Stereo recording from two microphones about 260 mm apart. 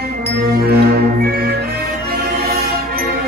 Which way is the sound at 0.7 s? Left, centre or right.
Right.